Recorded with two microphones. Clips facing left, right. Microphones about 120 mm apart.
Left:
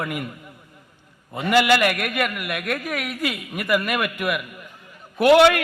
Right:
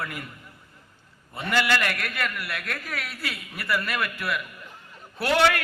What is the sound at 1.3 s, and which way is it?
A man's voice, 15° left (ahead or behind).